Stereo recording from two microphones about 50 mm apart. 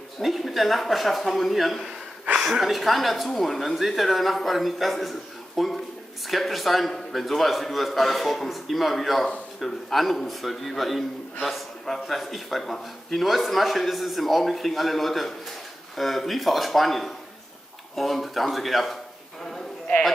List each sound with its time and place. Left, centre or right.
0.2 s a man's voice: centre